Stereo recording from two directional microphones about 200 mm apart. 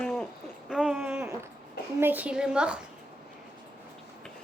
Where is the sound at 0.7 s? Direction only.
Centre (ahead or behind).